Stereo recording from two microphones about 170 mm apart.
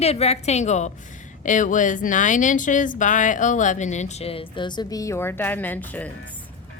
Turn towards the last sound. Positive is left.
turn(degrees=10)  # may be behind; listen again after turning